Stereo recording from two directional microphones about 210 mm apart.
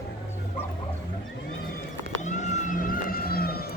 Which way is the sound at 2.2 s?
35° left (ahead or behind).